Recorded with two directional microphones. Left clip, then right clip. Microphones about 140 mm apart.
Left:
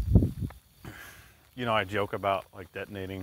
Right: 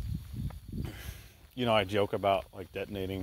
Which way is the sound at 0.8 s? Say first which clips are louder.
Left 2 dB; 25° right (ahead or behind).